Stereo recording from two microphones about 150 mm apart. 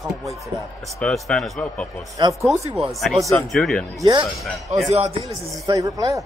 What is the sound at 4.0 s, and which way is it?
Speech, 25° right (ahead or behind).